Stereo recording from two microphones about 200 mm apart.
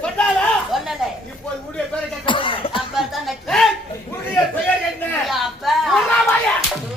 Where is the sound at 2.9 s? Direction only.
Centre (ahead or behind).